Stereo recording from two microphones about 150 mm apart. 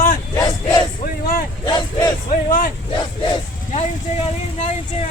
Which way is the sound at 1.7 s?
30° left (ahead or behind).